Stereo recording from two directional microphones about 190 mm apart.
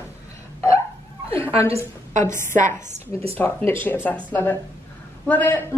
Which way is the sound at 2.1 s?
40° right (ahead or behind).